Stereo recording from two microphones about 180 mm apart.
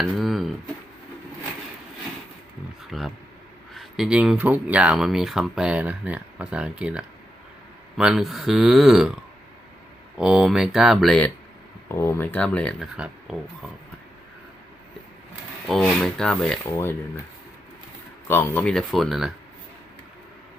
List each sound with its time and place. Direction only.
0.0 s a sound: centre (ahead or behind)
2.9 s a sound: centre (ahead or behind)
3.8 s speech: centre (ahead or behind)
10.2 s speech: 5° right (ahead or behind)
11.9 s speech: 15° left (ahead or behind)
15.7 s speech: 5° left (ahead or behind)
16.6 s speech: 15° left (ahead or behind)
18.3 s speech: 10° left (ahead or behind)